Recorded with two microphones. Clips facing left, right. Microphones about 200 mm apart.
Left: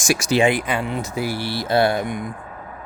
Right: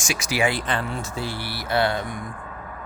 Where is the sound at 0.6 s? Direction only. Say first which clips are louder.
Left 3 dB; 10° left (ahead or behind).